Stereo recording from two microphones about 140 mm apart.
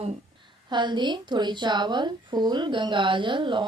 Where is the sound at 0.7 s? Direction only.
35° right (ahead or behind).